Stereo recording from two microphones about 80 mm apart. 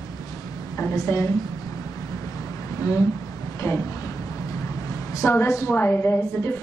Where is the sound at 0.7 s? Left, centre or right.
Left.